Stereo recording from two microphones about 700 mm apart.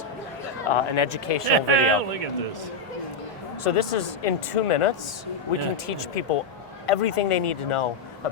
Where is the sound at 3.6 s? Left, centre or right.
Left.